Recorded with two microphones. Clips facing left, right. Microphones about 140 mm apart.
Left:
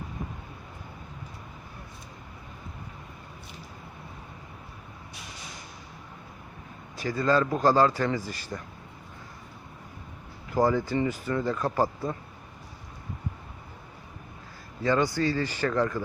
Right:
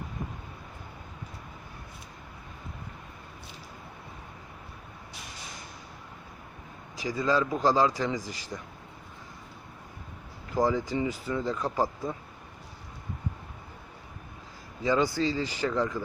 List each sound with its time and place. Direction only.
7.0 s a man's voice: 5° right (ahead or behind)
8.2 s speech: 90° right
10.6 s speech: 10° left (ahead or behind)
10.9 s a man's voice: 10° right (ahead or behind)
11.6 s speech: 5° left (ahead or behind)
14.8 s a man's voice: 15° right (ahead or behind)